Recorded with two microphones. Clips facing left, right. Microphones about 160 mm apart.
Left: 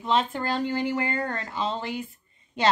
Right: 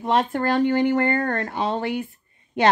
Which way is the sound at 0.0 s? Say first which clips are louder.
Right 4 dB; 55° right (ahead or behind).